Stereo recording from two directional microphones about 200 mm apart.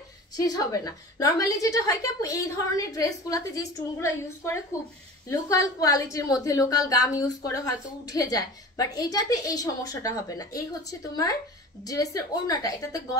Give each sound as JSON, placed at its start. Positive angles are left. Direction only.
{"t": 0.4, "sound": "a woman's voice", "side_deg": 20}